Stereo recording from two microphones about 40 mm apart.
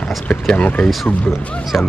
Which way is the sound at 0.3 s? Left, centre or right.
Left.